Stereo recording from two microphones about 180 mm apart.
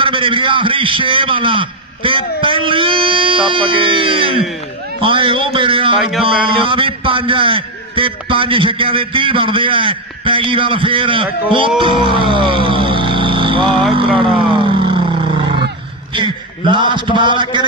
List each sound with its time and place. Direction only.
0.0 s a man's voice: 30° right (ahead or behind)
11.8 s music: 30° right (ahead or behind)
13.9 s a sound: 30° right (ahead or behind)
16.1 s a man's voice: 30° right (ahead or behind)